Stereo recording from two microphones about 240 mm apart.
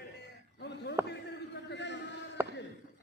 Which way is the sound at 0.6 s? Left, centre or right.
Left.